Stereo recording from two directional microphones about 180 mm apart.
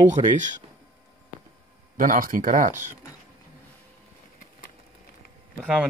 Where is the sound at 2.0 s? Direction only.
50° right (ahead or behind).